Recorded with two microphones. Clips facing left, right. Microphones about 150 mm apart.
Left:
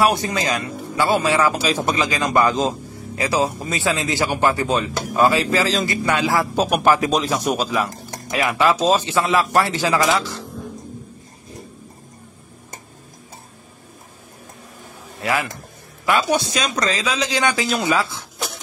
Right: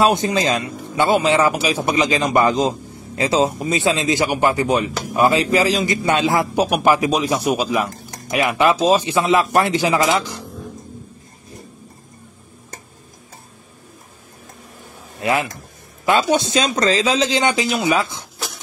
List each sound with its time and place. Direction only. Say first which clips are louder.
0.0 s a man's voice: right 2 dB; 25° right (ahead or behind)
16.1 s a man's voice: right 2 dB; 25° right (ahead or behind)